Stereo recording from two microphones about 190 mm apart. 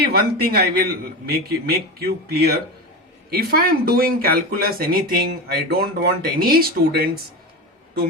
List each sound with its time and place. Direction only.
0.0 s speech: 55° right (ahead or behind)